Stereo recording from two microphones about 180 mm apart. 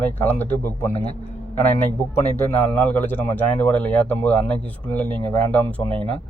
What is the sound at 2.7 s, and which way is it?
Speech, 10° left (ahead or behind).